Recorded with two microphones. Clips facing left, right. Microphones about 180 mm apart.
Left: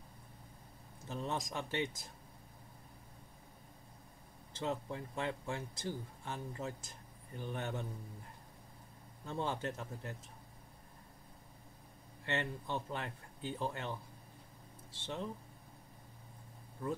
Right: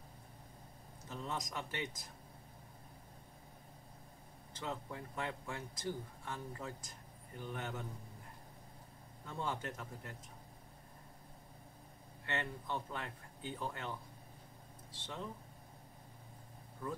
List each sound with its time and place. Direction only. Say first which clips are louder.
1.0 s speech: left 3 dB; 25° left (ahead or behind)
4.6 s speech: left 5 dB; 25° left (ahead or behind)
9.2 s speech: left 3 dB; 25° left (ahead or behind)
12.3 s speech: left 3 dB; 25° left (ahead or behind)